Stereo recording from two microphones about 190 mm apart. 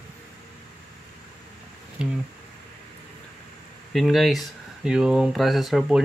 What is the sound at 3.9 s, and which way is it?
Speech, centre (ahead or behind).